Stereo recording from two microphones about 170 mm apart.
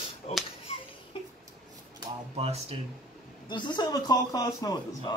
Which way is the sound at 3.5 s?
25° left (ahead or behind).